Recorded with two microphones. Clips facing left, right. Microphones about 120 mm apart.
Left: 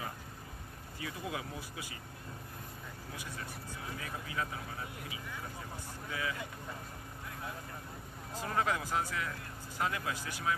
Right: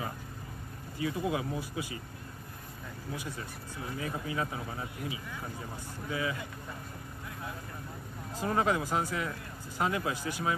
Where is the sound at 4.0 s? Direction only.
25° right (ahead or behind).